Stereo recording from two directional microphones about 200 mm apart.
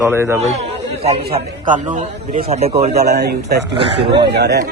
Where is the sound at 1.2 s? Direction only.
50° right (ahead or behind).